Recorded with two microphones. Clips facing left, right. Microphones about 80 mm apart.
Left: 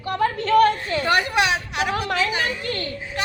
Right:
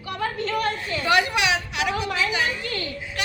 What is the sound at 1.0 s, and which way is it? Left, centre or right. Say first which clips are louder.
A woman's voice: left 1 dB; left.